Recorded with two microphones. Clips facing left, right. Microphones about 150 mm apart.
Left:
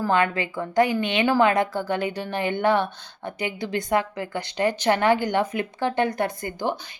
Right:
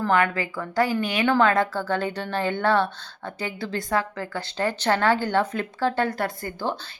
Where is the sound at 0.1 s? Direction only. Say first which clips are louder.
Even; 20° left (ahead or behind).